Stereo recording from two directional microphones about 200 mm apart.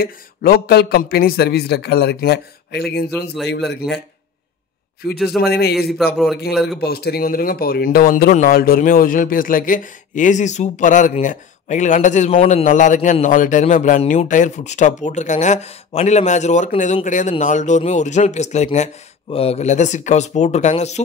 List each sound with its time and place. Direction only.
0.0 s a man's voice: 50° left (ahead or behind)
5.4 s a man's voice: 55° left (ahead or behind)
6.5 s a man's voice: centre (ahead or behind)
6.8 s speech: 55° left (ahead or behind); by 21.0 s 35° left (ahead or behind)